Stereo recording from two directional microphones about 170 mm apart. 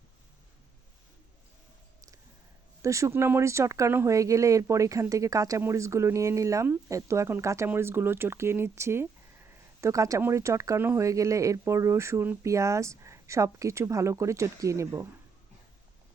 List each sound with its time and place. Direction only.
2.8 s speech: 15° right (ahead or behind)